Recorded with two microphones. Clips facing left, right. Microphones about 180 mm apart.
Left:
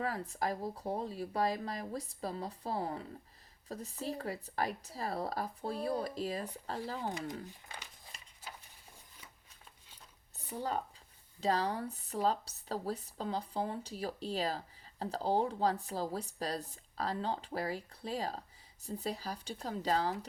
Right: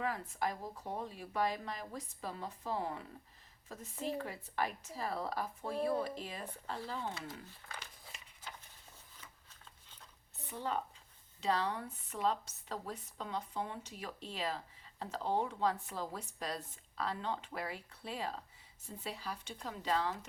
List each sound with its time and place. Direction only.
0.0 s a woman's voice: 35° left (ahead or behind)
10.3 s a sound: 40° left (ahead or behind)
11.3 s a woman's voice: 40° left (ahead or behind)